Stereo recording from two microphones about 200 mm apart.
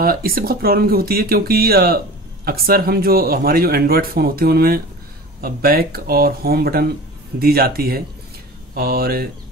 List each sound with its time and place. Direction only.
0.0 s speech: 45° right (ahead or behind)